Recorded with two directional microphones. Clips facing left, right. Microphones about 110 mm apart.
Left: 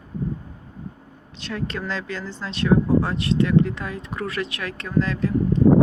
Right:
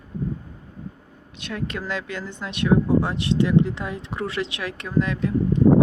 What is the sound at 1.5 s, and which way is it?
Speech, 10° right (ahead or behind).